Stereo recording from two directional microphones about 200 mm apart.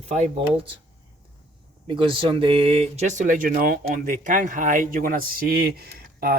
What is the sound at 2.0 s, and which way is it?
Speech, 25° right (ahead or behind).